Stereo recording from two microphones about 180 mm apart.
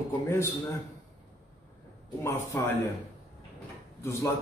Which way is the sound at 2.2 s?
15° left (ahead or behind).